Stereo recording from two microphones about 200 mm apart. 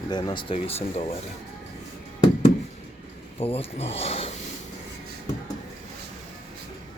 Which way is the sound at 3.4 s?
30° left (ahead or behind).